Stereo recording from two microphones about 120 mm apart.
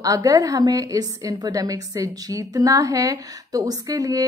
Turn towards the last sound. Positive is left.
turn(degrees=-30)  # may be behind; listen again after turning